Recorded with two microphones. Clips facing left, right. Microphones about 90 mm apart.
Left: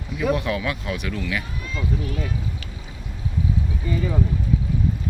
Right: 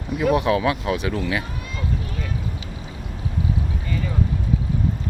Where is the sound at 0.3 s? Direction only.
30° right (ahead or behind).